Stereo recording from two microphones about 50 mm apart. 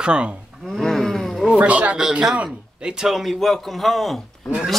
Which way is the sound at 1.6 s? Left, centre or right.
Right.